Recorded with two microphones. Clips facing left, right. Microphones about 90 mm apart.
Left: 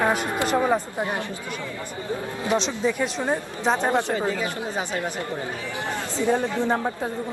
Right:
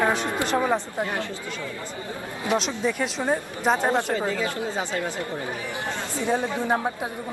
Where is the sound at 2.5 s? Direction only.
Centre (ahead or behind).